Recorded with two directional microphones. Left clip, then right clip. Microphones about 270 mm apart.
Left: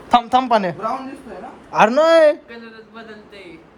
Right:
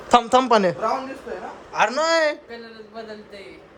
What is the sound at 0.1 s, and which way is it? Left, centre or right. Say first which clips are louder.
Speech: left 1 dB; centre.